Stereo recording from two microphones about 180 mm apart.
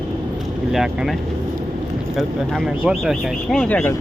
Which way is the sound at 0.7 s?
Centre (ahead or behind).